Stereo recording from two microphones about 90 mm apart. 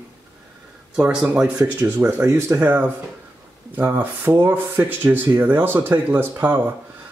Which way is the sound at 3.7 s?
20° right (ahead or behind).